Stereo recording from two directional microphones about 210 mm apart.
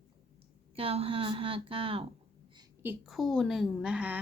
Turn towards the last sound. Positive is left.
turn(degrees=-5)  # may be behind; listen again after turning